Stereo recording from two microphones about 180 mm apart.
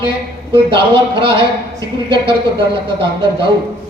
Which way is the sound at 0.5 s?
30° right (ahead or behind).